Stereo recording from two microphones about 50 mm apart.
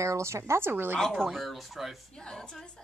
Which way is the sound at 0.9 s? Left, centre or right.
Centre.